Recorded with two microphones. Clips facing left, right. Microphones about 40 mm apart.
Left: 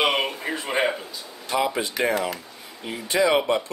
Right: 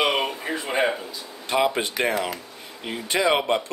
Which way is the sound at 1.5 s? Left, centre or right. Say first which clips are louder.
Right 2 dB; right.